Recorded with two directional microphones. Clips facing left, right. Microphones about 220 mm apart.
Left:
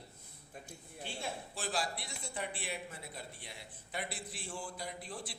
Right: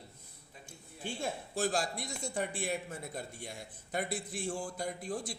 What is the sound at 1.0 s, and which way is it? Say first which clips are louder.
A man's voice: right 5 dB; 45° right (ahead or behind).